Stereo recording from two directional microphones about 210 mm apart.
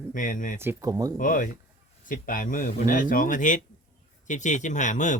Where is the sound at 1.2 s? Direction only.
40° left (ahead or behind).